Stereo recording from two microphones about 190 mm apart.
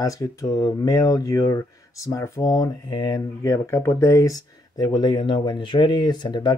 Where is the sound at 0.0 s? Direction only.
20° left (ahead or behind).